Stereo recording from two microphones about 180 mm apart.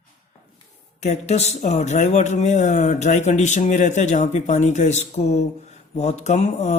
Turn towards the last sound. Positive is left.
turn(degrees=40)  # may be behind; listen again after turning